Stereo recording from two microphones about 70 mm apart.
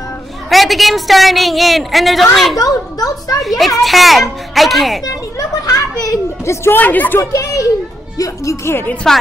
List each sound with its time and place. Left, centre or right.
0.5 s a woman's voice: centre
2.6 s a child's voice: left
3.4 s a woman's voice: centre
5.7 s children playing: left
6.7 s speech: left
7.2 s speech: left
9.1 s a woman's voice: centre